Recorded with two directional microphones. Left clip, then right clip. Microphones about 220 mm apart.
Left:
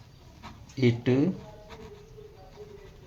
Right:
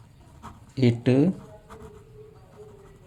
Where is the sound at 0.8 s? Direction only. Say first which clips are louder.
Right 3 dB; 50° right (ahead or behind).